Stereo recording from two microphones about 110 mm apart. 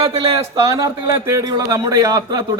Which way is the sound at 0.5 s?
30° right (ahead or behind).